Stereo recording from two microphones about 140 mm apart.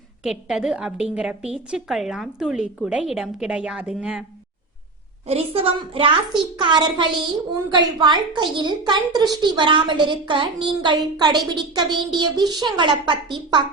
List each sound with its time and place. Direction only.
0.2 s a woman's voice: 5° right (ahead or behind)
5.3 s a woman's voice: 45° right (ahead or behind)